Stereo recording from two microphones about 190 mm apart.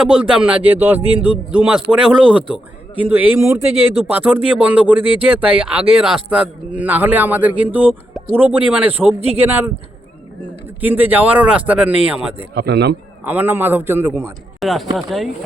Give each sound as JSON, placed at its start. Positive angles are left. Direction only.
{"t": 0.0, "sound": "speech", "side_deg": -5}
{"t": 5.0, "sound": "speech", "side_deg": -30}
{"t": 5.3, "sound": "speech", "side_deg": -10}
{"t": 9.0, "sound": "speech", "side_deg": -30}
{"t": 10.8, "sound": "speech", "side_deg": -10}
{"t": 12.5, "sound": "speech", "side_deg": -60}
{"t": 13.2, "sound": "speech", "side_deg": -10}
{"t": 14.6, "sound": "speech", "side_deg": 0}